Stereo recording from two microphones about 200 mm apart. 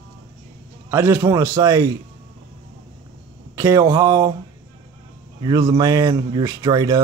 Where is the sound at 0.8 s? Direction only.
10° right (ahead or behind).